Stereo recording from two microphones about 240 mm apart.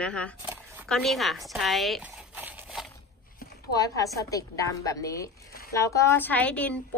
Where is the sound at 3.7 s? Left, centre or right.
Centre.